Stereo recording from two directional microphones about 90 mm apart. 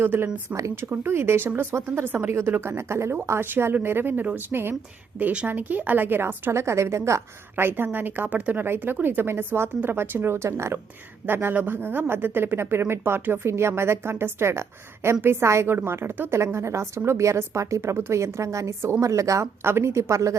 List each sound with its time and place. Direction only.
0.0 s a woman's voice: 25° right (ahead or behind)